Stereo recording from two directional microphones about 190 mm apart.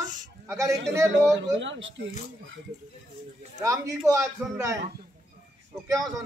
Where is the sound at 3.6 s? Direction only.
15° right (ahead or behind).